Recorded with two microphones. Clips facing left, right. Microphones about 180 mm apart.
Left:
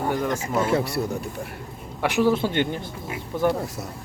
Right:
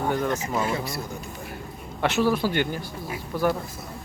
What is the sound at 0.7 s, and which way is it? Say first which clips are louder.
Speech: left 6 dB; 65° left (ahead or behind).